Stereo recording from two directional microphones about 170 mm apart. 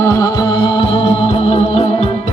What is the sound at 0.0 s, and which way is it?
Music, 20° left (ahead or behind).